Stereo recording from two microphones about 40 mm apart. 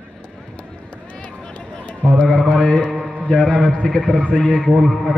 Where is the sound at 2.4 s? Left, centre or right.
Centre.